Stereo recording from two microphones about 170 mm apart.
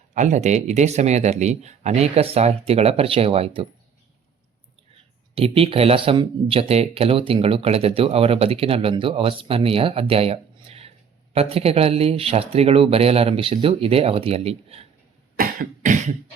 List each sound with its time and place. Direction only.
0.1 s speech: 45° right (ahead or behind)
5.3 s speech: 35° right (ahead or behind)
15.4 s cough: 50° right (ahead or behind)